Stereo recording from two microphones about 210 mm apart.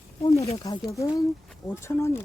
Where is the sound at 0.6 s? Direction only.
20° left (ahead or behind).